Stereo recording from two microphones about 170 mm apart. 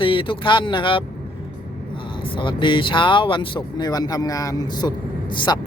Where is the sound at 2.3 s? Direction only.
30° left (ahead or behind).